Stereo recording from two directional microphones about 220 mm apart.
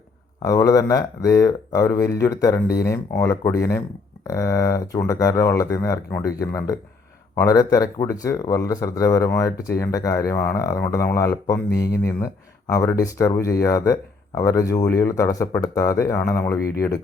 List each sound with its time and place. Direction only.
0.4 s speech: 15° left (ahead or behind)